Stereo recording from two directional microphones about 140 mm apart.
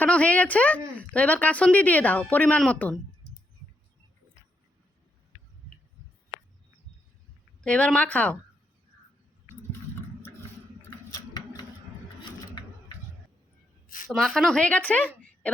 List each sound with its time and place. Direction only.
0.0 s speech: 10° left (ahead or behind)
7.6 s speech: 5° left (ahead or behind)
11.1 s a sound: 30° left (ahead or behind)
14.2 s speech: 5° left (ahead or behind)